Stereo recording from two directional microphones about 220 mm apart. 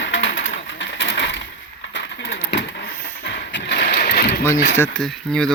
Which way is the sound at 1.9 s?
50° left (ahead or behind).